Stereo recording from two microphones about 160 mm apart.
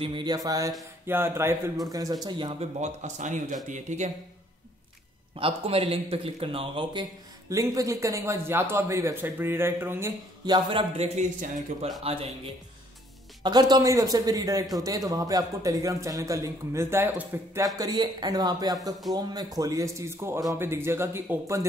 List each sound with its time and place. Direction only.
0.0 s a man's voice: 30° right (ahead or behind)
2.8 s speech: 50° right (ahead or behind)
5.3 s a man's voice: 35° right (ahead or behind); by 10.1 s 15° right (ahead or behind)
10.4 s a man's voice: 30° right (ahead or behind)
11.1 s speech: 50° right (ahead or behind)
12.0 s a man's voice: 40° right (ahead or behind)
13.4 s a man's voice: 25° right (ahead or behind)